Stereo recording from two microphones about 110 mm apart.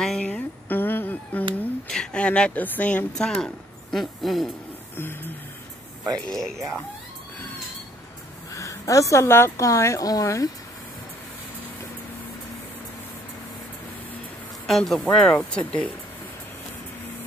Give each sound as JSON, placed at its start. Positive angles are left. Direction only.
{"t": 0.0, "sound": "a sound", "side_deg": 5}
{"t": 1.9, "sound": "speech", "side_deg": 10}
{"t": 4.9, "sound": "a woman's voice", "side_deg": 20}
{"t": 6.0, "sound": "speech", "side_deg": 5}
{"t": 8.5, "sound": "a woman's voice", "side_deg": 30}
{"t": 14.7, "sound": "speech", "side_deg": 0}